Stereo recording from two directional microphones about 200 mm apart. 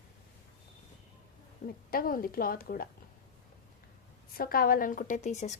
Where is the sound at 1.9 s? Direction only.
45° left (ahead or behind).